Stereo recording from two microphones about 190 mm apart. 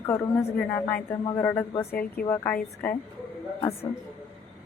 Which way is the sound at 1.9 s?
55° left (ahead or behind).